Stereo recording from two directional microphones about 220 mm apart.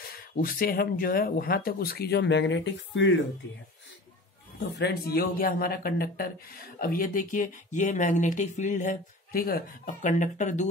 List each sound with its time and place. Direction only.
0.0 s speech: 40° left (ahead or behind)
4.7 s speech: 45° left (ahead or behind)